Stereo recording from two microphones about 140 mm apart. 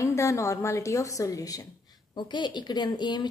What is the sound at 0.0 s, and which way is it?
A woman's voice, 20° left (ahead or behind).